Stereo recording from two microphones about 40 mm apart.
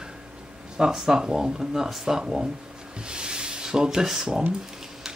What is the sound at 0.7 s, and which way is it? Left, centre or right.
Speech, centre.